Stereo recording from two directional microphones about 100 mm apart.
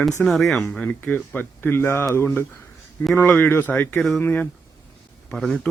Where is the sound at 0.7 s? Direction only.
15° left (ahead or behind).